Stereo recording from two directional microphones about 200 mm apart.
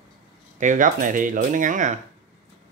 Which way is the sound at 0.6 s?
40° right (ahead or behind).